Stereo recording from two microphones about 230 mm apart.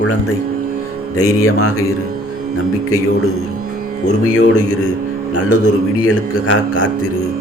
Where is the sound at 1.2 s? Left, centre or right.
Left.